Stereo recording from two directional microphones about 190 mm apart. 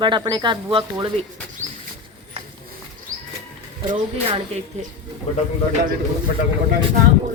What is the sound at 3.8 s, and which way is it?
Speech, 25° right (ahead or behind).